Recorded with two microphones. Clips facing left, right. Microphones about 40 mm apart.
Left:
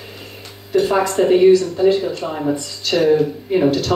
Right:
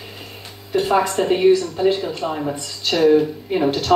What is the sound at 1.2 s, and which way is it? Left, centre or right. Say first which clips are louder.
Speech: left 7 dB; centre.